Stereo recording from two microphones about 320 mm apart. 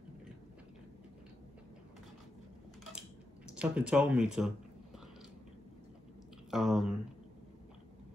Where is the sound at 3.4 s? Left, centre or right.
Centre.